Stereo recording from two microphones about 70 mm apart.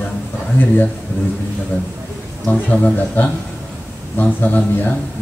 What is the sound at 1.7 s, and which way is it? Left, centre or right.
Speech, left.